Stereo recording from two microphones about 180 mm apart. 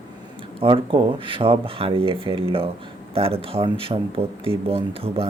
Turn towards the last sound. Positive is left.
turn(degrees=-30)  # may be behind; listen again after turning